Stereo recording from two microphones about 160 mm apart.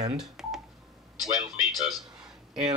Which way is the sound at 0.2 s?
Centre (ahead or behind).